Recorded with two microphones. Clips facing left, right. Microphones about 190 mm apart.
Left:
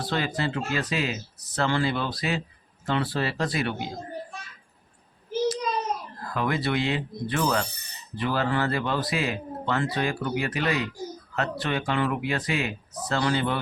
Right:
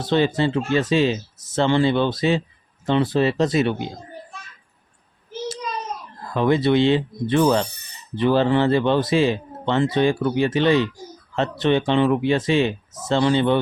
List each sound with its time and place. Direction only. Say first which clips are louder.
0.0 s speech: right 8 dB; 25° right (ahead or behind)
6.2 s speech: right 9 dB; 25° right (ahead or behind)